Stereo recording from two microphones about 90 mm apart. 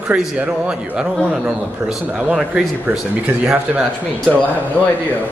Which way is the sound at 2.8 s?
20° right (ahead or behind).